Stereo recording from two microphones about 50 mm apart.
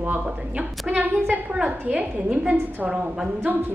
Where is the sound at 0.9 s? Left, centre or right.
Right.